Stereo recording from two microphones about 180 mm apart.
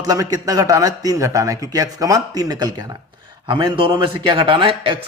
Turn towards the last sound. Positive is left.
turn(degrees=-30)  # may be behind; listen again after turning